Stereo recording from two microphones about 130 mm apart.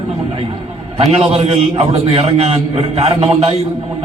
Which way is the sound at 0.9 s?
50° right (ahead or behind).